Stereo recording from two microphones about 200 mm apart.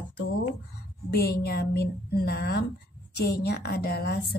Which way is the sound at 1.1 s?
50° left (ahead or behind).